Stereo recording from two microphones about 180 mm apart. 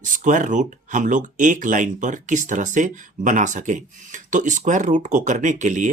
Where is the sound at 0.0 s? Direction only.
45° right (ahead or behind).